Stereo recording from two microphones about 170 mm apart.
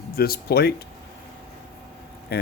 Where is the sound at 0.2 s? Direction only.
65° left (ahead or behind).